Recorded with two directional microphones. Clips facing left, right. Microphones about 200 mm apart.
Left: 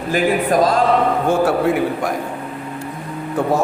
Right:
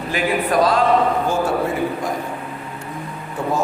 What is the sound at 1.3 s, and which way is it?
Speech, 70° left (ahead or behind).